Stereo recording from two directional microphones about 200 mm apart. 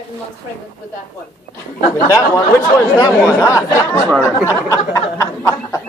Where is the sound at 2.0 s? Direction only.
15° left (ahead or behind).